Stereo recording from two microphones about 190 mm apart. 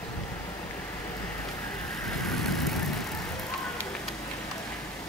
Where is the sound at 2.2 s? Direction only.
Centre (ahead or behind).